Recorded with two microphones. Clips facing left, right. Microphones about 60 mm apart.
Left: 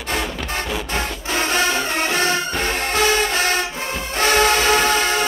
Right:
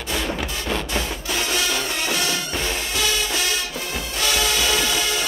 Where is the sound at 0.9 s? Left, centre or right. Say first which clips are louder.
Left 3 dB; left.